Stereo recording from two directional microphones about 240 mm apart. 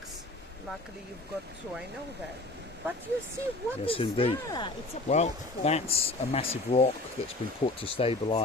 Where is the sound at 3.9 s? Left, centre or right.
Left.